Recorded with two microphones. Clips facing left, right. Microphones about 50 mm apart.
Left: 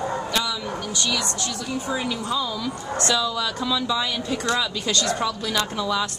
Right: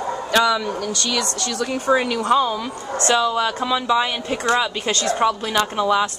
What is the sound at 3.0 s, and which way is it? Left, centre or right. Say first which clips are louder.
Speech: right 6 dB; right.